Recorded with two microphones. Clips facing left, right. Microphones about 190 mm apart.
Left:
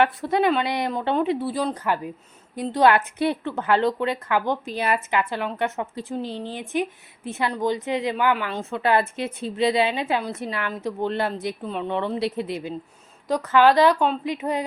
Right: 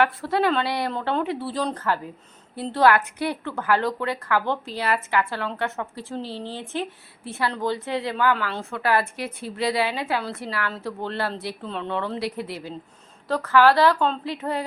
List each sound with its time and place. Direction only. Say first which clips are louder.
0.0 s a woman's voice: left 1 dB; 20° left (ahead or behind)